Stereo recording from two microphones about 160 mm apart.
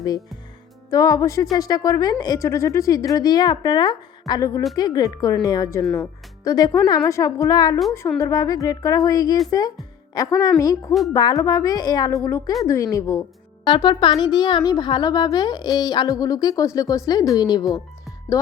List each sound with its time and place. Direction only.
0.9 s a child's voice: 20° left (ahead or behind)
5.8 s speech: 5° left (ahead or behind)
6.4 s a child's voice: 20° left (ahead or behind)
13.7 s a child's voice: 30° left (ahead or behind)